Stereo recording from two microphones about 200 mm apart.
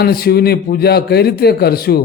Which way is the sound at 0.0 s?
50° left (ahead or behind).